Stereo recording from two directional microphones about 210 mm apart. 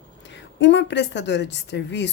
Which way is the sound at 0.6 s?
60° left (ahead or behind).